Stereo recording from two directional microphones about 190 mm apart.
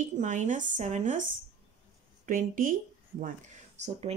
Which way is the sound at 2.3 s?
45° right (ahead or behind).